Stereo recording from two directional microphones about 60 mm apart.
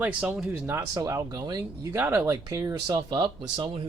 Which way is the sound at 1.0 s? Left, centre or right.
Right.